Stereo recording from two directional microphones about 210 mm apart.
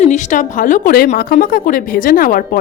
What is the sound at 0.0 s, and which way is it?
A woman's voice, 35° left (ahead or behind).